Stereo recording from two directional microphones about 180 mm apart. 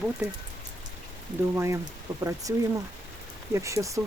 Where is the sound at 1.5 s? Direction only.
15° right (ahead or behind).